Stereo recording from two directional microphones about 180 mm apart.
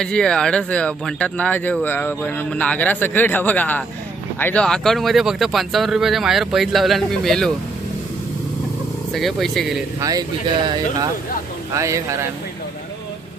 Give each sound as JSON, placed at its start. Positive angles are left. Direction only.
{"t": 0.0, "sound": "speech", "side_deg": 5}
{"t": 9.1, "sound": "speech", "side_deg": 0}
{"t": 10.0, "sound": "speech", "side_deg": -20}